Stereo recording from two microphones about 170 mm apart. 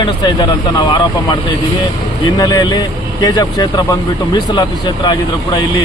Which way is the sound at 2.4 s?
25° left (ahead or behind).